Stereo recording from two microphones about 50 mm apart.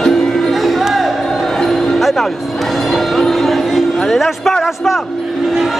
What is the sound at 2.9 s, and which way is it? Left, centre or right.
Music, centre.